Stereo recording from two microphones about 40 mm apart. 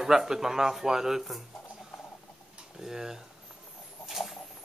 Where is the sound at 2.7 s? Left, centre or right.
Centre.